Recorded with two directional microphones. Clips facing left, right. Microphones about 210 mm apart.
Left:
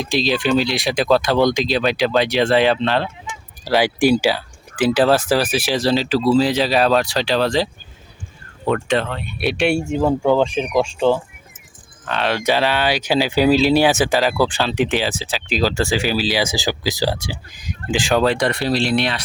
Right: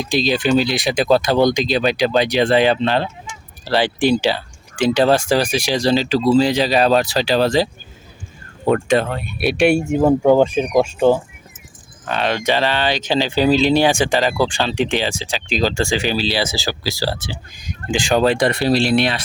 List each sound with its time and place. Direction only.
0.0 s speech: centre (ahead or behind)
3.6 s speech: 10° left (ahead or behind); by 7.7 s 5° right (ahead or behind)
8.7 s speech: 10° right (ahead or behind)
10.8 s speech: 50° right (ahead or behind)
12.0 s speech: centre (ahead or behind)